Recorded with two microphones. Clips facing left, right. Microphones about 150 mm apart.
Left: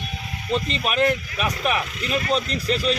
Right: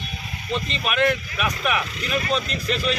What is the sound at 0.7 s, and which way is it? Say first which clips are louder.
Speech: right 1 dB; 35° left (ahead or behind).